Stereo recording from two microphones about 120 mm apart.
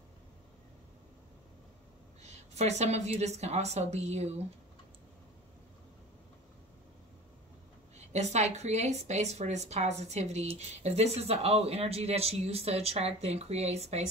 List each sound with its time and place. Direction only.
2.2 s a woman's voice: 65° right (ahead or behind)
8.0 s a woman's voice: 65° right (ahead or behind)